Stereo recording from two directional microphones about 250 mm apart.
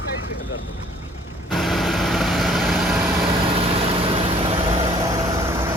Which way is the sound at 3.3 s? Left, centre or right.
Right.